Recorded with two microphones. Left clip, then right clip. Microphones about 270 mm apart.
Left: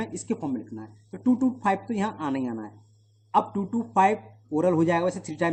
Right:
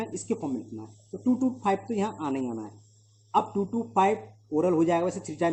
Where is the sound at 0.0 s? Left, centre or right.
Left.